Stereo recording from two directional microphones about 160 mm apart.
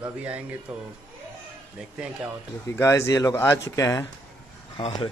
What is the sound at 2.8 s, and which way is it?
Speech, 20° left (ahead or behind).